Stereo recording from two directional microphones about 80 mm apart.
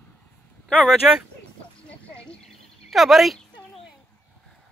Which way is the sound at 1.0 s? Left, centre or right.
Centre.